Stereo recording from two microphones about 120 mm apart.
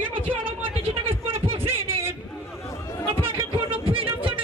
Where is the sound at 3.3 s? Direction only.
50° right (ahead or behind).